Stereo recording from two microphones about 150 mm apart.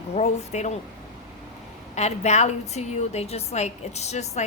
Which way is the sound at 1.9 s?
50° left (ahead or behind).